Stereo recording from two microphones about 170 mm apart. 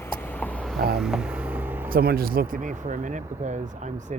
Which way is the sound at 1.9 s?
60° right (ahead or behind).